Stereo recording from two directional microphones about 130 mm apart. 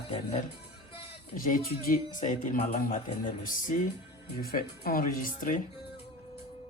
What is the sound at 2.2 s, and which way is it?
Speech, 75° left (ahead or behind).